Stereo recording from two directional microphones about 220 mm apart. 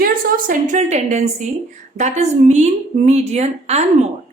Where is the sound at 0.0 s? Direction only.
40° right (ahead or behind).